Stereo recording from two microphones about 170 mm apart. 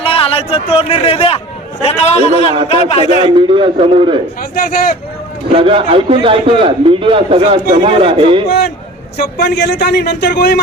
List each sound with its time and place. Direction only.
0.0 s a man's voice: 35° left (ahead or behind)
3.2 s a man's voice: 30° right (ahead or behind)
4.5 s speech: 60° left (ahead or behind)
5.5 s a man's voice: 30° right (ahead or behind)
8.4 s a man's voice: 70° left (ahead or behind)